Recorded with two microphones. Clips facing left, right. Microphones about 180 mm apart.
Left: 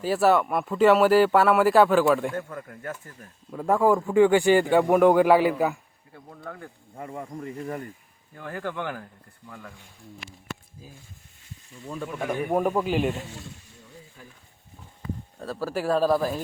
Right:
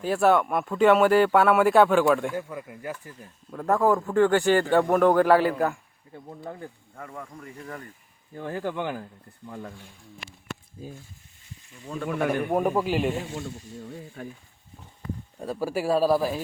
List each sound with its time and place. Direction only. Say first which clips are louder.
0.0 s speech: even; 5° left (ahead or behind)
2.3 s speech: even; 10° right (ahead or behind)
3.5 s speech: left 1 dB; 5° left (ahead or behind)
6.1 s speech: right 2 dB; 20° right (ahead or behind)
6.9 s speech: left 4 dB; 20° left (ahead or behind)
8.4 s speech: right 2 dB; 20° right (ahead or behind)
9.5 s speech: right 5 dB; 35° right (ahead or behind)
12.5 s speech: left 3 dB; centre (ahead or behind)
14.2 s speech: right 14 dB; 65° right (ahead or behind)
15.4 s speech: right 2 dB; 15° right (ahead or behind)